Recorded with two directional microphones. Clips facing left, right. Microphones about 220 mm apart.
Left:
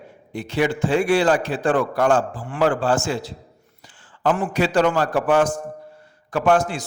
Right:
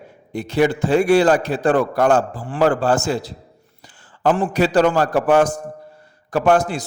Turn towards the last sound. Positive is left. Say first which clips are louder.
# right 2 dB
turn(degrees=-40)  # may be behind; listen again after turning